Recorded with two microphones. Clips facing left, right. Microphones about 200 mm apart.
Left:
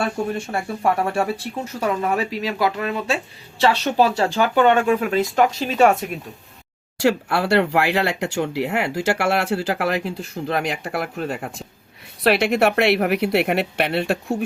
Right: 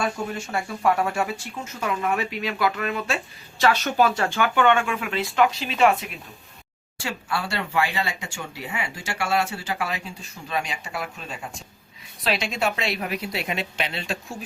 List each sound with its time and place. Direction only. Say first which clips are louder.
0.3 s speech: left 3 dB; 30° left (ahead or behind)
7.0 s speech: left 10 dB; 65° left (ahead or behind)